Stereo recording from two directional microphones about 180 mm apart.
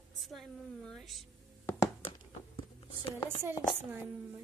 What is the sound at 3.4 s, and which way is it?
Speech, 10° right (ahead or behind).